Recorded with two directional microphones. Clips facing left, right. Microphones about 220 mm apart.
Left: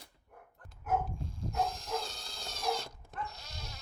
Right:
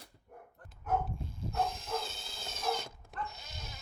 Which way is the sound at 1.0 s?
Centre (ahead or behind).